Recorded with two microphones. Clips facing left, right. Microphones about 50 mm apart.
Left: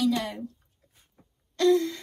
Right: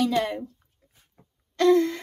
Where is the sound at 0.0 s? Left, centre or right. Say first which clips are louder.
Right 3 dB; right.